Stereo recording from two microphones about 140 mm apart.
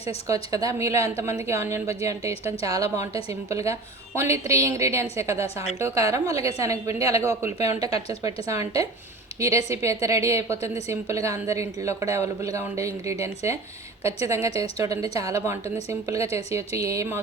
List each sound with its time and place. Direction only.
0.5 s a woman's voice: 25° right (ahead or behind)